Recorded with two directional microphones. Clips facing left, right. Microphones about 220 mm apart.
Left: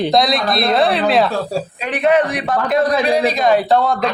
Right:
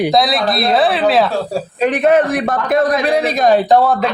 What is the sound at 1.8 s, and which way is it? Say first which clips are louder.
A man's voice: right 4 dB; 45° right (ahead or behind).